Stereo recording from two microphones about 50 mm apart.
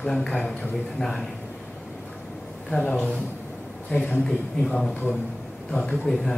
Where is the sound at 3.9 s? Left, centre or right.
Left.